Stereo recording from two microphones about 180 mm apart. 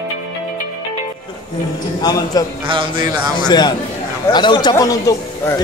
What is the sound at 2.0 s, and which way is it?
A man's voice, 20° left (ahead or behind).